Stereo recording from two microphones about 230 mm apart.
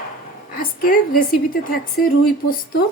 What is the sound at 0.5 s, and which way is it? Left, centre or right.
A woman's voice, left.